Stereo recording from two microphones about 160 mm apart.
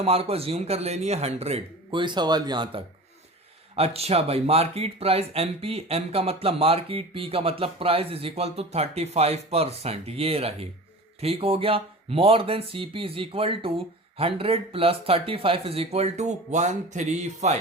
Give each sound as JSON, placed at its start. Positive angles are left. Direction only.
{"t": 0.0, "sound": "speech", "side_deg": -40}
{"t": 3.8, "sound": "speech", "side_deg": -40}